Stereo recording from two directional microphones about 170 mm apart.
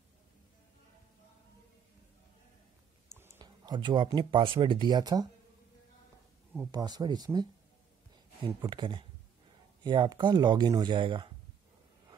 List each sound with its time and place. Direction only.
3.3 s speech: 25° right (ahead or behind)
6.7 s speech: 25° right (ahead or behind)